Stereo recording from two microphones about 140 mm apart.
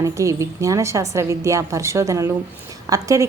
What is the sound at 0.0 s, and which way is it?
A woman's voice, 20° right (ahead or behind).